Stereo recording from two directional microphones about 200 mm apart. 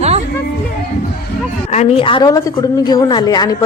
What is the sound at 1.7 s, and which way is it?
A woman's voice, 30° left (ahead or behind).